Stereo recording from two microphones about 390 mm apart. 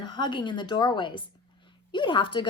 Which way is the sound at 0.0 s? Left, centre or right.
Centre.